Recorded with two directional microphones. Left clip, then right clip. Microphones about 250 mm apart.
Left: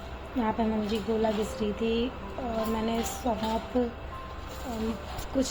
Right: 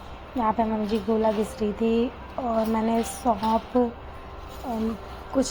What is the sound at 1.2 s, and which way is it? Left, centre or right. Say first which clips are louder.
Speech: right 4 dB; centre.